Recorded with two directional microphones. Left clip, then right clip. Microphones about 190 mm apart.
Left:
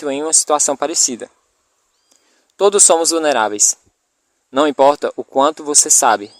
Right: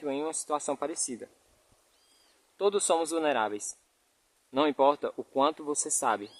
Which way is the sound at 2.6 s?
45° left (ahead or behind).